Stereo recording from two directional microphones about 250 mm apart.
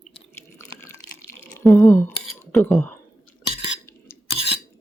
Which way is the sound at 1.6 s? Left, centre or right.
Centre.